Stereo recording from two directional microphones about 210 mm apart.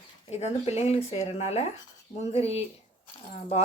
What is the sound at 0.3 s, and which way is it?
Speech, 30° left (ahead or behind).